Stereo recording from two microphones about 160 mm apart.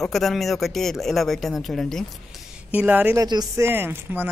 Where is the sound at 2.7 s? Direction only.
10° right (ahead or behind).